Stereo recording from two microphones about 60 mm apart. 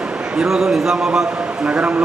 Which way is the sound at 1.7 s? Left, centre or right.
Centre.